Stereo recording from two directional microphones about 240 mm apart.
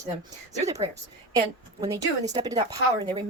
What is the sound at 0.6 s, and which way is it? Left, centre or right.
A woman's voice, centre.